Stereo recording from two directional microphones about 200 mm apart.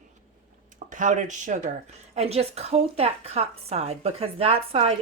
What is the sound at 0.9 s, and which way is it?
A woman's voice, 40° right (ahead or behind).